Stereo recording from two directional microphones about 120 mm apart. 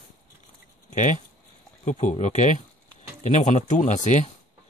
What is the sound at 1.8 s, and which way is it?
Speech, 80° left.